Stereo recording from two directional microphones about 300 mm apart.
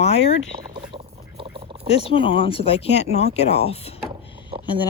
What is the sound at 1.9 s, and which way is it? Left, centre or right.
Speech, centre.